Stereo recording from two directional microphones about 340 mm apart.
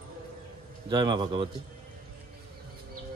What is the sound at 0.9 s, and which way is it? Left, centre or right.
Speech, centre.